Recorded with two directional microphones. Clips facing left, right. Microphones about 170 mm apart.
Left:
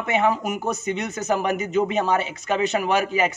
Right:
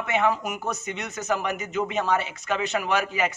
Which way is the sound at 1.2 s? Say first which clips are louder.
Left 4 dB; 40° left (ahead or behind).